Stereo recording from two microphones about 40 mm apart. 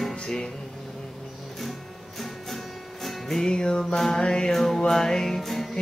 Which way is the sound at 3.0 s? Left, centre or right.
Centre.